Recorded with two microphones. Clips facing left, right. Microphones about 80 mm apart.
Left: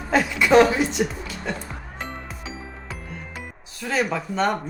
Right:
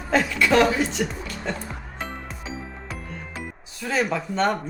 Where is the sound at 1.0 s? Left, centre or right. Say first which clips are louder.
Even; centre.